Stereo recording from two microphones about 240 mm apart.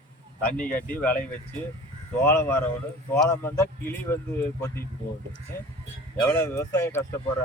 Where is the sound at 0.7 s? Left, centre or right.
Centre.